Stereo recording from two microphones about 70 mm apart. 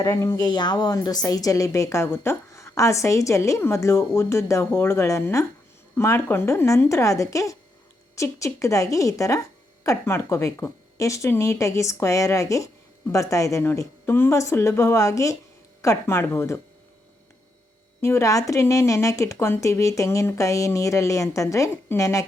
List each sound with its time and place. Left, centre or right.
0.0 s speech: left
0.3 s speech: left
0.9 s speech: left
13.7 s speech: left
18.0 s speech: left